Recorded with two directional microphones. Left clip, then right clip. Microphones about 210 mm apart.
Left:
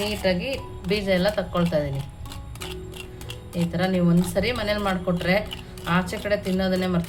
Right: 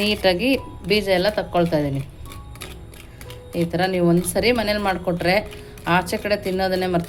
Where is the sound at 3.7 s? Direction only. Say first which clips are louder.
Right 5 dB; 35° right (ahead or behind).